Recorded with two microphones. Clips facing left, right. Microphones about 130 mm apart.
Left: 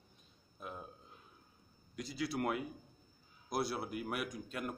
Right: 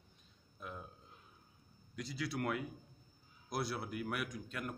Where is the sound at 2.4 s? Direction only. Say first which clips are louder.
Left 2 dB; 15° left (ahead or behind).